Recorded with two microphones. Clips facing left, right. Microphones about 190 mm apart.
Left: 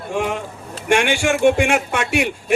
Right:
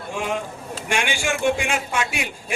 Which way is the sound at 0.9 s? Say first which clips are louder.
Left 7 dB; 65° left (ahead or behind).